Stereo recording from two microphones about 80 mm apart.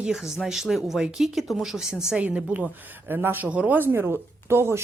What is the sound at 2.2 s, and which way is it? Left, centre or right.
Speech, centre.